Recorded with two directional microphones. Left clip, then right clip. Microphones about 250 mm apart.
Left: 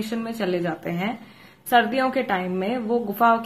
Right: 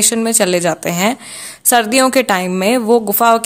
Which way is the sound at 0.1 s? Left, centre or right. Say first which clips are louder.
Right 12 dB; right.